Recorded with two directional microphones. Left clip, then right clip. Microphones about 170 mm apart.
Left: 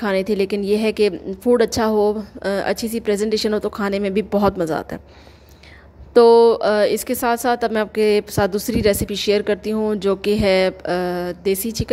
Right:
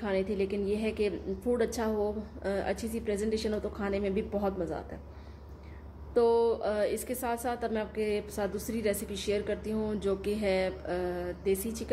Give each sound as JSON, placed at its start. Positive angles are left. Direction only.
{"t": 0.0, "sound": "a woman's voice", "side_deg": 60}
{"t": 6.1, "sound": "a woman's voice", "side_deg": 55}